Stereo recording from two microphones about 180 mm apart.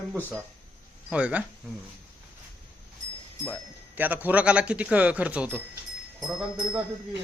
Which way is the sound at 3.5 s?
10° right (ahead or behind).